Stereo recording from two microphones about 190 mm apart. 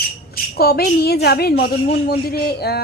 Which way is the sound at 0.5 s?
55° left (ahead or behind).